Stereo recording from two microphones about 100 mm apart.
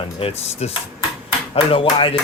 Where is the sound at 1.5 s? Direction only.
65° left (ahead or behind).